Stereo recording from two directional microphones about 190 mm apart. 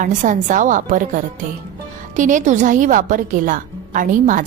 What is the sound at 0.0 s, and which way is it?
A woman's voice, 40° right (ahead or behind).